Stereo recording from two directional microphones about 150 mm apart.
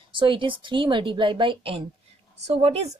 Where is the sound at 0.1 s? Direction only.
35° right (ahead or behind).